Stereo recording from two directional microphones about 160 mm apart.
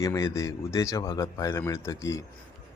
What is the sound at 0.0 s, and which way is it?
A man's voice, 20° left (ahead or behind).